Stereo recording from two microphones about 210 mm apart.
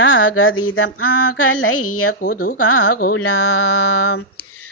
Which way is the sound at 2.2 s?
45° left (ahead or behind).